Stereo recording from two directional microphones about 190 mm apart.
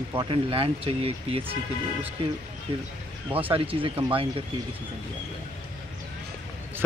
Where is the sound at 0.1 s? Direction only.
25° right (ahead or behind).